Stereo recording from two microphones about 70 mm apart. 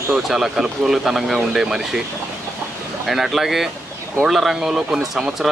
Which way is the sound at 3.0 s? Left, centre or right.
Centre.